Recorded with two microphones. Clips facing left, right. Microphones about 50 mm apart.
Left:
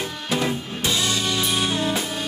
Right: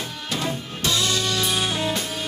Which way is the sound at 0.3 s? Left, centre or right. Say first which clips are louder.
Left 4 dB; centre.